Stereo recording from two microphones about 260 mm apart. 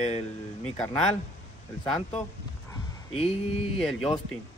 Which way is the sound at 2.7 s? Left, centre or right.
Left.